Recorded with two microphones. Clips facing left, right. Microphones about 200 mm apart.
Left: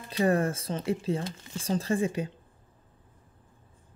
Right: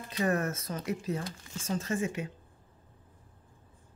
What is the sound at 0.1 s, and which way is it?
Speech, 30° left (ahead or behind).